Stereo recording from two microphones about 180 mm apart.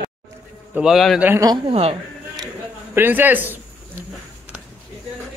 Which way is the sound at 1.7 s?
35° right (ahead or behind).